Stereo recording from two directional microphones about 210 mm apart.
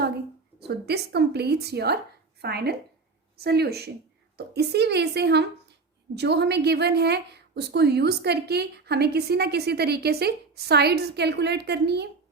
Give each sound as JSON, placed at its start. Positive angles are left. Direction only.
{"t": 0.7, "sound": "a woman's voice", "side_deg": -50}